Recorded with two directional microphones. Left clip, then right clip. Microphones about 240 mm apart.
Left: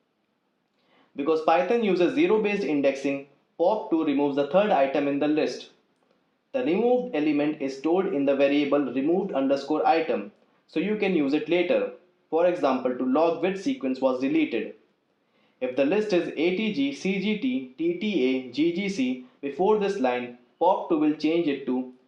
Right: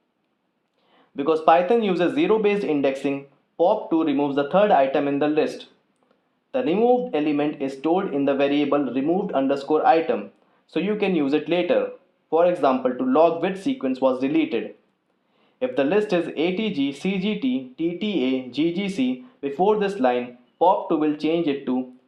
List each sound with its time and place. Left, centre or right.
1.1 s speech: right
6.5 s speech: right